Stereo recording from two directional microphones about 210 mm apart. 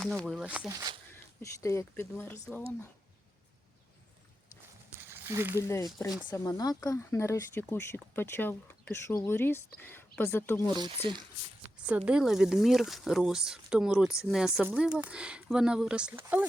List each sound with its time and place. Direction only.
0.0 s speech: centre (ahead or behind)
1.4 s speech: 15° left (ahead or behind)
4.9 s a sound: 10° right (ahead or behind)
5.5 s speech: 15° left (ahead or behind)
10.7 s speech: 20° right (ahead or behind)
11.9 s speech: 5° right (ahead or behind)